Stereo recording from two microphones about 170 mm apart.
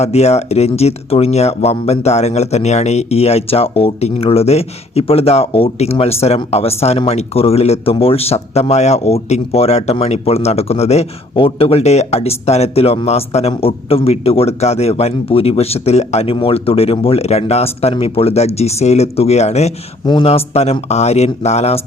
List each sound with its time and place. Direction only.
0.0 s speech: 40° left (ahead or behind)